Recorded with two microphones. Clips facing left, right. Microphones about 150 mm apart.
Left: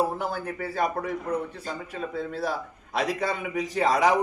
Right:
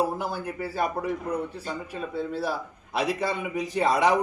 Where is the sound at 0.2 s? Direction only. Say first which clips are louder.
Even; 10° right (ahead or behind).